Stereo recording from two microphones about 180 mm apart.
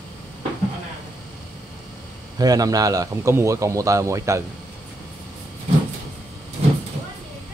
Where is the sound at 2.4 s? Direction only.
20° right (ahead or behind).